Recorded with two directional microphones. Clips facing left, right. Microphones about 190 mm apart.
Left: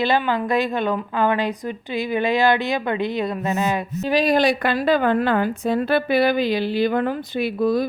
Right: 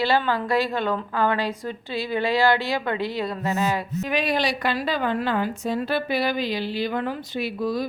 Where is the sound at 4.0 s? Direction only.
35° left (ahead or behind).